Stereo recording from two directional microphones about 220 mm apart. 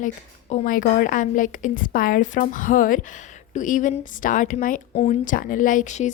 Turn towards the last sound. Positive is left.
turn(degrees=35)  # may be behind; listen again after turning